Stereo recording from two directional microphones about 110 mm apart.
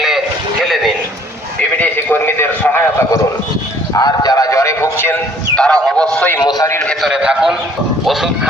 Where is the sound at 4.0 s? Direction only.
35° left (ahead or behind).